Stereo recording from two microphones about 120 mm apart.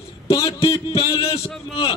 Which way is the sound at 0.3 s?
50° left (ahead or behind).